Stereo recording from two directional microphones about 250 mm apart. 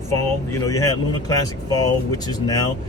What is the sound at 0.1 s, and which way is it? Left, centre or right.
Speech, centre.